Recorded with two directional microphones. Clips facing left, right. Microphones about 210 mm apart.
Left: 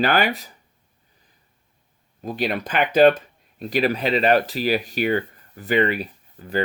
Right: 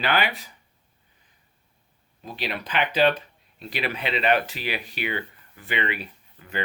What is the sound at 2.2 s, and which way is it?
Speech, 45° left (ahead or behind).